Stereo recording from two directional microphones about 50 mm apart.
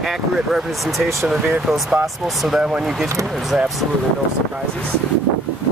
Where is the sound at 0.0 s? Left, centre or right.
Centre.